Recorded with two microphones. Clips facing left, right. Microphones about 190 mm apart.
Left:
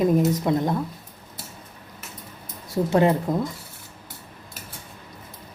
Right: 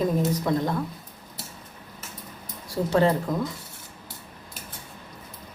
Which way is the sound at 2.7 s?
20° left (ahead or behind).